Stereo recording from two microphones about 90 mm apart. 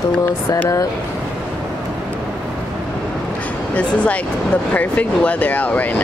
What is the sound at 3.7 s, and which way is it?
Speech, 15° left (ahead or behind).